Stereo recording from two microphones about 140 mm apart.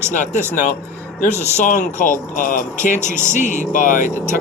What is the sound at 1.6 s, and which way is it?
Speech, 70° left (ahead or behind).